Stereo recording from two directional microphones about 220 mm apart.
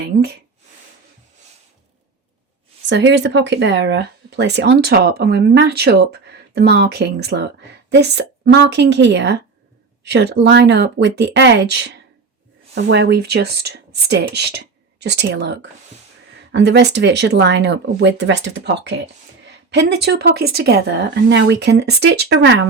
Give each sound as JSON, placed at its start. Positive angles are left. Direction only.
{"t": 2.9, "sound": "speech", "side_deg": -55}
{"t": 10.4, "sound": "speech", "side_deg": -50}